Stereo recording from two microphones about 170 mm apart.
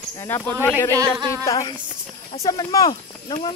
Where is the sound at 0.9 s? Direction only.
20° right (ahead or behind).